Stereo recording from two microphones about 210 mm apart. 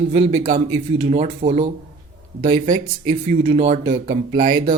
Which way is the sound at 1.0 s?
30° right (ahead or behind).